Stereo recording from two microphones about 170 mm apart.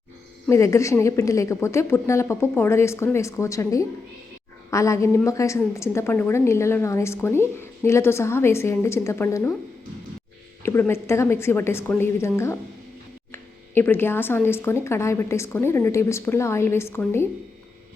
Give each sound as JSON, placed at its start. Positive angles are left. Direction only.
{"t": 0.4, "sound": "speech", "side_deg": 15}
{"t": 10.6, "sound": "speech", "side_deg": 15}
{"t": 13.3, "sound": "speech", "side_deg": 15}